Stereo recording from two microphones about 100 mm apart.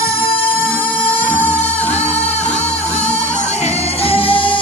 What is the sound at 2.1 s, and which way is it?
Music, 90° left.